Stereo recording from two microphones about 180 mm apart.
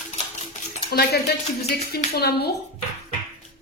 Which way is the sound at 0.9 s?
65° left (ahead or behind).